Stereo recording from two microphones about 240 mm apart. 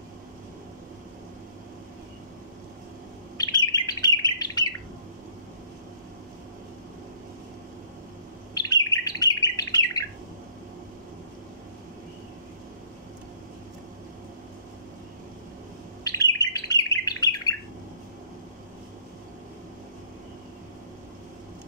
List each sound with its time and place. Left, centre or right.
3.3 s bird: centre
8.5 s bird: centre
16.0 s bird: centre